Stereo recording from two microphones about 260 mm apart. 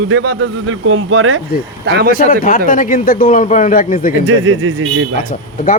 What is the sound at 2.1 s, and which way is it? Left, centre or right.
A man's voice, left.